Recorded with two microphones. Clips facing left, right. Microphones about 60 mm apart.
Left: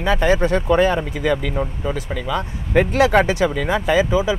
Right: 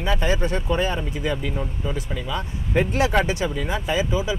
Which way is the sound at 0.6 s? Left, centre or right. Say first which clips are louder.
Left 8 dB; left.